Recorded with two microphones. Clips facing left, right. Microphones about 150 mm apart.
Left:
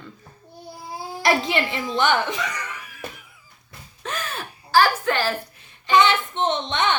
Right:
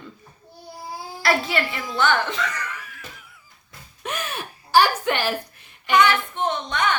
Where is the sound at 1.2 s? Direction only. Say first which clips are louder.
Left 1 dB; 20° left (ahead or behind).